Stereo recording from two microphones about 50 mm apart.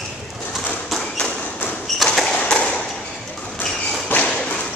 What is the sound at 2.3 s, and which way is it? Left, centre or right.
Tap, left.